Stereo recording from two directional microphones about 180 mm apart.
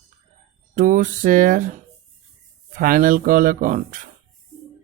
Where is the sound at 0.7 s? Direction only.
45° right (ahead or behind).